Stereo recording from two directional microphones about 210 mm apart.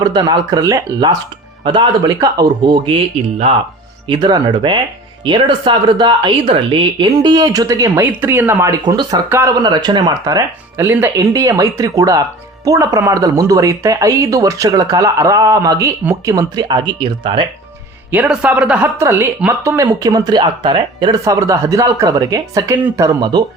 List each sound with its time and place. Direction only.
0.0 s speech: 20° right (ahead or behind)
18.1 s speech: 5° right (ahead or behind)